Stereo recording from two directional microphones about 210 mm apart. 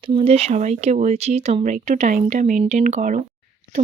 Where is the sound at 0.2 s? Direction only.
30° right (ahead or behind).